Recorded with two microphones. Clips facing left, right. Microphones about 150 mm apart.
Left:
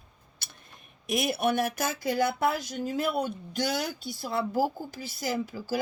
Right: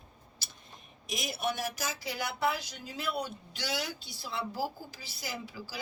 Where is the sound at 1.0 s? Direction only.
55° left (ahead or behind).